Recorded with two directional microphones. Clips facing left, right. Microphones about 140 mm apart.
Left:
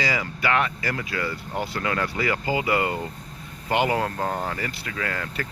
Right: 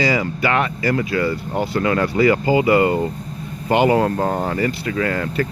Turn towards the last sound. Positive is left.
turn(degrees=-20)  # may be behind; listen again after turning